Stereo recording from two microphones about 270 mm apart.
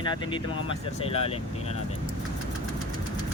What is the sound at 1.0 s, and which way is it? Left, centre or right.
Speech, left.